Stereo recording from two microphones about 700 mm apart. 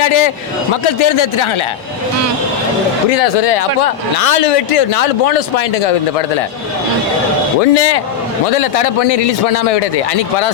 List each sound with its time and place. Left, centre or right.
0.0 s a man's voice: left
3.1 s a man's voice: left
7.6 s a man's voice: left